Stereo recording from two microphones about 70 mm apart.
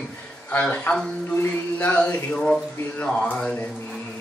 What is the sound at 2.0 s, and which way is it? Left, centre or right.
Speech, centre.